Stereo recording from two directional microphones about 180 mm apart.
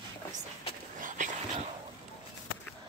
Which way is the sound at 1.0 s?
45° right (ahead or behind).